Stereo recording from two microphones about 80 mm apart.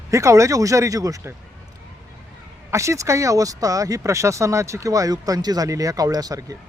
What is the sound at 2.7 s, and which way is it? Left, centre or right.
A man's voice, right.